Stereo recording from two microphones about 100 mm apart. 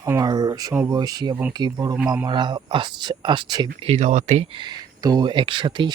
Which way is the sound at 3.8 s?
90° right.